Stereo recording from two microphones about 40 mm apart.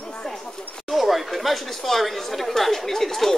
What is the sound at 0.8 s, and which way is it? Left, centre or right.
Speech, centre.